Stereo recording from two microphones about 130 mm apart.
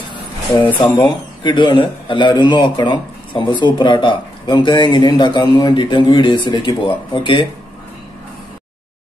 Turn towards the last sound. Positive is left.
turn(degrees=35)  # may be behind; listen again after turning